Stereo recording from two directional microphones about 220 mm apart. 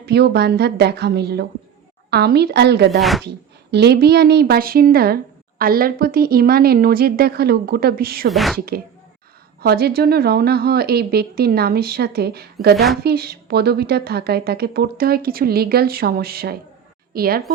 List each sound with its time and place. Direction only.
0.0 s a woman's voice: 50° right (ahead or behind)
3.0 s speech: centre (ahead or behind)
3.2 s a woman's voice: 50° right (ahead or behind)
8.3 s speech: centre (ahead or behind)
9.6 s a woman's voice: 45° right (ahead or behind)
12.7 s speech: centre (ahead or behind)
13.0 s a woman's voice: 45° right (ahead or behind)